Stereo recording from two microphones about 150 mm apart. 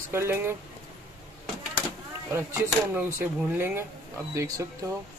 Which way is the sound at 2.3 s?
15° right (ahead or behind).